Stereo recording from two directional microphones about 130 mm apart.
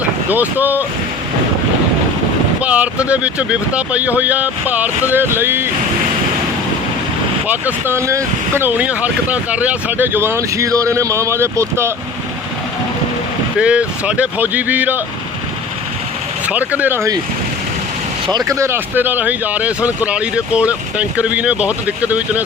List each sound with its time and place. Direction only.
0.3 s speech: 15° right (ahead or behind)
2.6 s speech: 10° right (ahead or behind)
7.4 s speech: 15° right (ahead or behind)
13.6 s speech: 10° right (ahead or behind)
16.5 s speech: 10° right (ahead or behind)
18.3 s speech: 30° right (ahead or behind); by 22.4 s 10° right (ahead or behind)